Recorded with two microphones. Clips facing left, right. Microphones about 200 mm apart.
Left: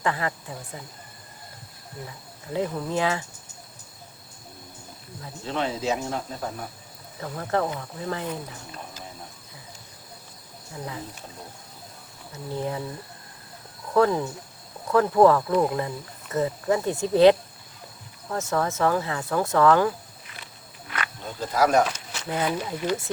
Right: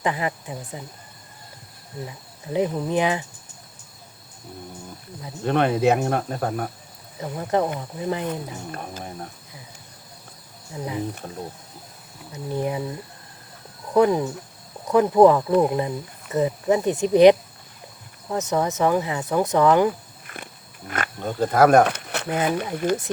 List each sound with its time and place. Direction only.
0.0 s speech: 15° right (ahead or behind)
2.0 s speech: 20° right (ahead or behind)
5.5 s speech: 60° right (ahead or behind)
7.2 s speech: 15° right (ahead or behind)
8.7 s speech: 55° right (ahead or behind)
12.5 s speech: 15° right (ahead or behind)
13.9 s speech: 15° right (ahead or behind)
20.2 s wild animals: 50° right (ahead or behind)
22.4 s speech: 50° right (ahead or behind)